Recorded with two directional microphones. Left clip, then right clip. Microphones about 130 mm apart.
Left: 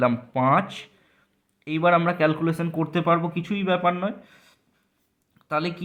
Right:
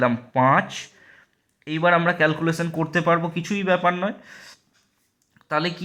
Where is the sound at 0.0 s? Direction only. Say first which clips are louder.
Right 3 dB; 15° right (ahead or behind).